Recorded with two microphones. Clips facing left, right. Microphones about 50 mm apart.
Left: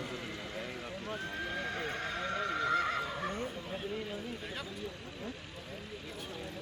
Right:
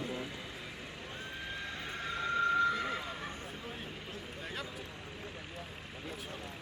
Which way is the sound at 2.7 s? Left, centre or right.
Left.